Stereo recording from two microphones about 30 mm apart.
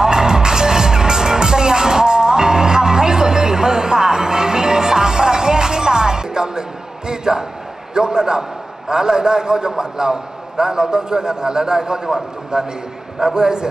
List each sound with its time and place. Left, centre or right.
0.0 s music: right
7.1 s basketball bounce: right
7.9 s a man's voice: right